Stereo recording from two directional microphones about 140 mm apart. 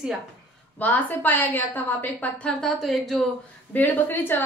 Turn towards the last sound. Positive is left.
turn(degrees=15)  # may be behind; listen again after turning